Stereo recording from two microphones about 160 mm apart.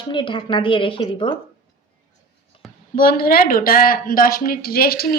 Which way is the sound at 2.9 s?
65° left (ahead or behind).